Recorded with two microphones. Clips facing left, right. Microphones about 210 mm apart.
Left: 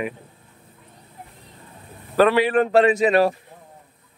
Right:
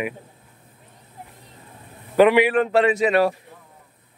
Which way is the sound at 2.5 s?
40° left (ahead or behind).